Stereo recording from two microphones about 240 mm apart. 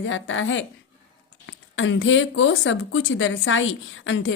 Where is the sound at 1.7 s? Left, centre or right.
Left.